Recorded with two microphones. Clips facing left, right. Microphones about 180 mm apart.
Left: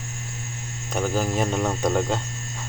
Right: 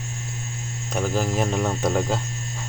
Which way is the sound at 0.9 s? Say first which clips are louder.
Even; centre (ahead or behind).